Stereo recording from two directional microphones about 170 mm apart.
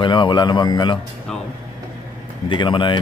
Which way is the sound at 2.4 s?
30° left (ahead or behind).